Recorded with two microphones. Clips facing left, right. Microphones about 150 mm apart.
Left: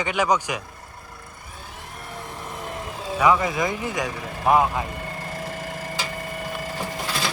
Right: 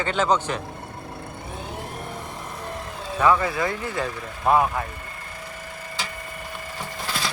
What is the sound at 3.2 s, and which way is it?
Speech, 15° left (ahead or behind).